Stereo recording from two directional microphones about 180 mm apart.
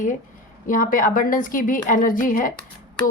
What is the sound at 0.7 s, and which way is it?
A woman's voice, 50° left (ahead or behind).